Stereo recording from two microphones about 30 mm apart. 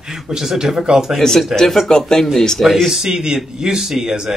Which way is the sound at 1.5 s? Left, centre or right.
Centre.